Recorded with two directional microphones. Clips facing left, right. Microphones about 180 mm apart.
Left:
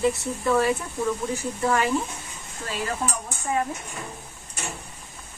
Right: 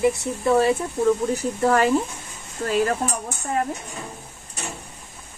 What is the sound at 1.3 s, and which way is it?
Speech, 40° right (ahead or behind).